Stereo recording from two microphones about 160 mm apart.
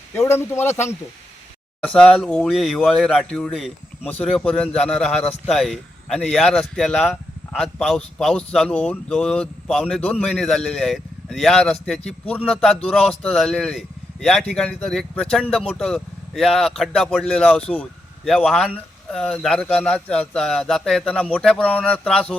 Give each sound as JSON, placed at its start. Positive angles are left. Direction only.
{"t": 0.1, "sound": "a man's voice", "side_deg": 15}
{"t": 1.9, "sound": "a man's voice", "side_deg": 5}